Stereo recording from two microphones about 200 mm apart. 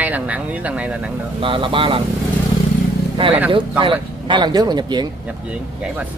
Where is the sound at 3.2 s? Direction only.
25° right (ahead or behind).